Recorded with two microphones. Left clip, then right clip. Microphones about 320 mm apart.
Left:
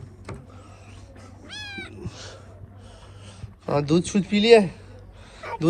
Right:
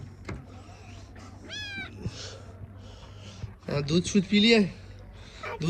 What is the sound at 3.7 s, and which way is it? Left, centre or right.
Speech, centre.